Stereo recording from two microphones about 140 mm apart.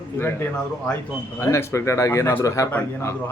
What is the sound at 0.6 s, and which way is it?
Speech, 5° left (ahead or behind).